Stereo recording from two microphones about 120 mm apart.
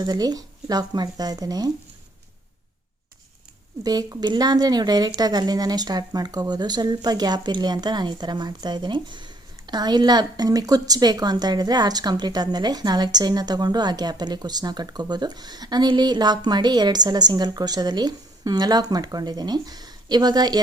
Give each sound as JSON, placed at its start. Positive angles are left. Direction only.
{"t": 0.0, "sound": "speech", "side_deg": -30}
{"t": 3.8, "sound": "speech", "side_deg": -30}